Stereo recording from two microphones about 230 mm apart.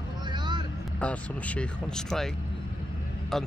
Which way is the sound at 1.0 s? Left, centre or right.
Centre.